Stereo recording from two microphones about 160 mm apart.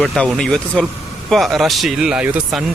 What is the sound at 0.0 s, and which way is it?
Speech, centre (ahead or behind).